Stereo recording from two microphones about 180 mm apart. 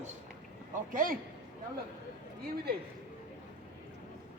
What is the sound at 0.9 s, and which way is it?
Speech, 50° right (ahead or behind).